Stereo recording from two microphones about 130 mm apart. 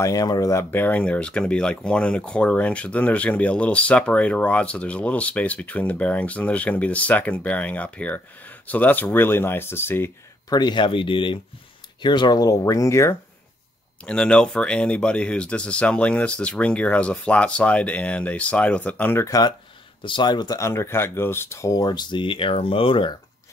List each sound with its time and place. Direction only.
0.0 s speech: 30° left (ahead or behind)
10.5 s speech: 35° left (ahead or behind)
14.0 s speech: 5° left (ahead or behind)
19.2 s speech: 30° left (ahead or behind)
20.0 s speech: 40° left (ahead or behind)